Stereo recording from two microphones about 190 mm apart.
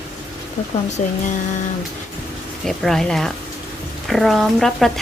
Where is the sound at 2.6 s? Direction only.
Centre (ahead or behind).